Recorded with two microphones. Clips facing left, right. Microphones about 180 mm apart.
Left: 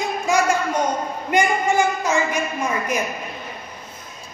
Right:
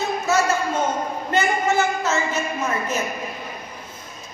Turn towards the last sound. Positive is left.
turn(degrees=15)  # may be behind; listen again after turning